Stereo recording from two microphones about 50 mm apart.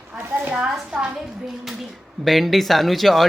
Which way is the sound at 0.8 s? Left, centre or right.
Centre.